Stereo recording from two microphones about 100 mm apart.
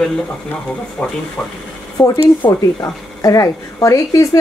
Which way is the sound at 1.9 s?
35° left (ahead or behind).